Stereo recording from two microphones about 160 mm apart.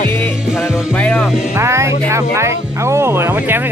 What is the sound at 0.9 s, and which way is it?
Speech, 10° left (ahead or behind).